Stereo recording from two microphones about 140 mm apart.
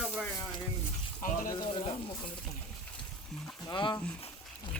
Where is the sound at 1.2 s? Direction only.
75° left (ahead or behind).